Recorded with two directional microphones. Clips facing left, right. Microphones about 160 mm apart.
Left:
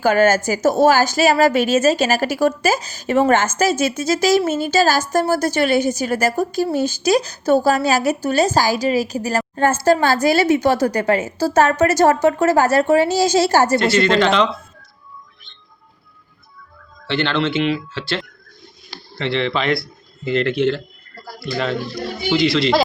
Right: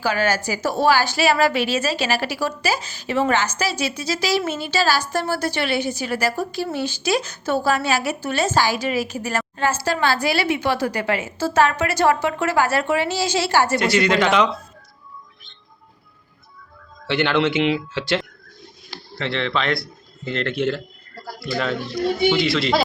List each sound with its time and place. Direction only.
0.0 s a woman's voice: 50° left (ahead or behind)
9.6 s a woman's voice: 50° left (ahead or behind)
13.7 s speech: 15° right (ahead or behind)
17.1 s speech: 15° right (ahead or behind)
19.2 s speech: centre (ahead or behind)